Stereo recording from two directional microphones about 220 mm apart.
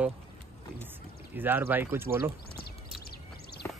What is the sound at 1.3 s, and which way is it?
Speech, 10° right (ahead or behind).